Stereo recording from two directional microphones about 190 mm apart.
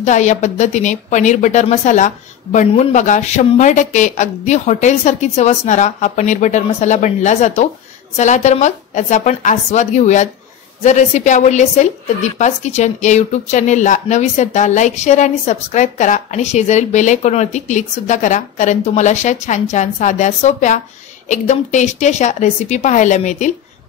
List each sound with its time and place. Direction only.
0.0 s speech: 40° left (ahead or behind)